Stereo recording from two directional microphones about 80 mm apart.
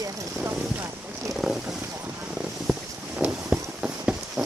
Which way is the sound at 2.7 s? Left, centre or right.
Centre.